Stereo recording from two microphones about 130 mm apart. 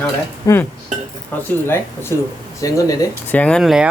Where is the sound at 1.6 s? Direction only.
20° left (ahead or behind).